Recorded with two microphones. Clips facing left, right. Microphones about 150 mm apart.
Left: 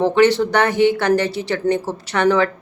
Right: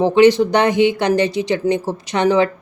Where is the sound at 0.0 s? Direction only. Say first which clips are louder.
Right 3 dB; 15° right (ahead or behind).